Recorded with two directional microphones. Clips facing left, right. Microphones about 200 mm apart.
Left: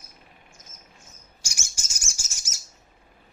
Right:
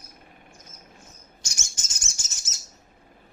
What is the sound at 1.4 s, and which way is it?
Bird, 10° left (ahead or behind).